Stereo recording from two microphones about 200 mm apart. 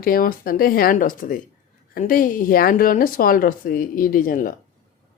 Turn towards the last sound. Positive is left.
turn(degrees=45)  # may be behind; listen again after turning